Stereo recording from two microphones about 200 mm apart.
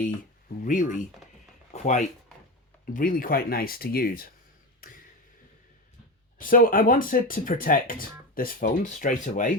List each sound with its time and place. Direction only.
0.6 s speech: 40° left (ahead or behind)
6.4 s speech: 45° left (ahead or behind)